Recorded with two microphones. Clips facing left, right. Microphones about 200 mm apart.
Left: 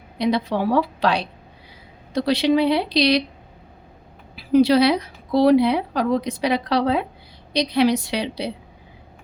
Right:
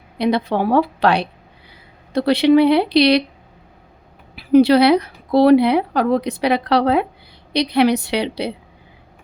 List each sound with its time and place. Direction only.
0.2 s speech: 60° right (ahead or behind)
4.4 s speech: 60° right (ahead or behind)